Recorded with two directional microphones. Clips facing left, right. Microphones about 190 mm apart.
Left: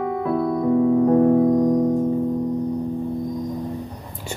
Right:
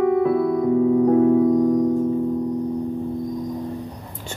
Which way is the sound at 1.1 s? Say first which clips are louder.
Even; 50° left (ahead or behind).